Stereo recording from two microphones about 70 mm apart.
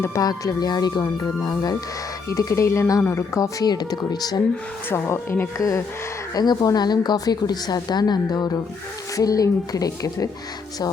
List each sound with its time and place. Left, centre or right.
0.2 s a woman's voice: left
2.3 s a woman's voice: left
3.7 s a woman's voice: left
4.9 s speech: left
5.5 s a woman's voice: left
6.3 s speech: left
6.6 s a woman's voice: left
9.1 s speech: left